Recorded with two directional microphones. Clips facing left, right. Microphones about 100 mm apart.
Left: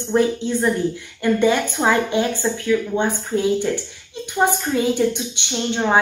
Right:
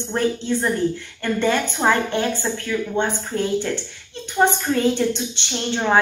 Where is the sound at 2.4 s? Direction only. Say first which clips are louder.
Left 3 dB; 5° right (ahead or behind).